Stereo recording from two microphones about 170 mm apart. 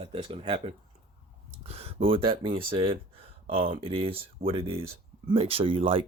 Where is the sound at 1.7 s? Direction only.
35° right (ahead or behind).